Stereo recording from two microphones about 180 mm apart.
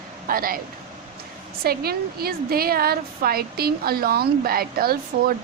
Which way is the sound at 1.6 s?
60° right (ahead or behind).